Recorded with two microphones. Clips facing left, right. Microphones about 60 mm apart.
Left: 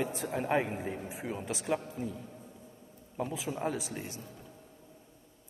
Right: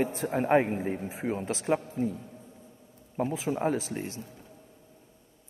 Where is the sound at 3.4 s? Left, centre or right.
Right.